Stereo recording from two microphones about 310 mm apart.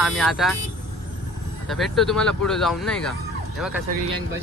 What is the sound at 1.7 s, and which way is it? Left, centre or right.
Speech, centre.